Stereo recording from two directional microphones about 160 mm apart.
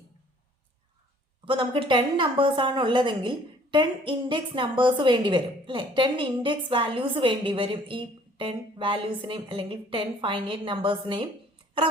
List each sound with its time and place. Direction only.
1.5 s a woman's voice: 35° right (ahead or behind)